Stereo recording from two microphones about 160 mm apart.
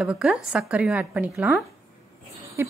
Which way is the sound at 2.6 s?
15° right (ahead or behind).